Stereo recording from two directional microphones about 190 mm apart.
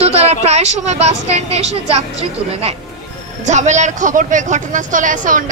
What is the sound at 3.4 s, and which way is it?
Speech, 40° right (ahead or behind).